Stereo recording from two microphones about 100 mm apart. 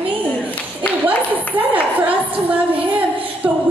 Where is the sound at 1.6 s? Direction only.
15° right (ahead or behind).